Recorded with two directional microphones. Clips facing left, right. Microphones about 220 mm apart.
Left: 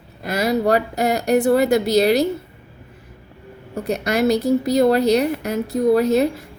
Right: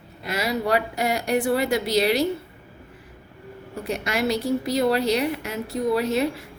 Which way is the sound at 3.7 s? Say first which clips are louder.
Left 6 dB; 40° left (ahead or behind).